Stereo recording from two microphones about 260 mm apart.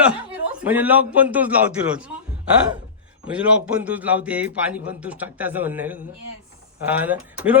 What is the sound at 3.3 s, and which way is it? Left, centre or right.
A man's voice, centre.